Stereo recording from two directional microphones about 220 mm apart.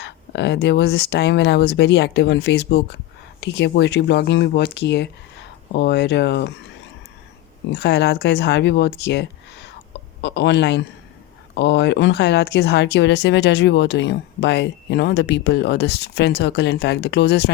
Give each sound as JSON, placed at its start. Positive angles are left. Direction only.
{"t": 0.0, "sound": "speech", "side_deg": 50}
{"t": 7.7, "sound": "speech", "side_deg": 50}